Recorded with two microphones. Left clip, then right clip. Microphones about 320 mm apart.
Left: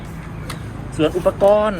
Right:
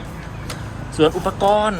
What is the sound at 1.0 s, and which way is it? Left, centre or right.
Speech, centre.